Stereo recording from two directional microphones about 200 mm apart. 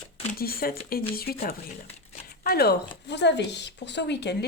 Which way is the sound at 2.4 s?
50° left (ahead or behind).